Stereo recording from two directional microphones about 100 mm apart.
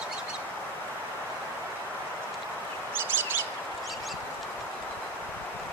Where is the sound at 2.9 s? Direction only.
20° right (ahead or behind).